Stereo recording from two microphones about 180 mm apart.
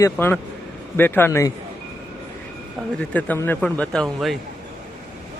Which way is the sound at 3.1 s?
10° left (ahead or behind).